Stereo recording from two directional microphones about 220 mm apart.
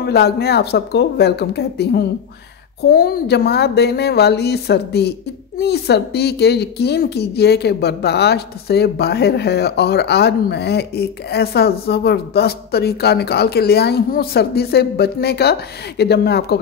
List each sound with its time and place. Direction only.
0.0 s a woman's voice: 50° left (ahead or behind)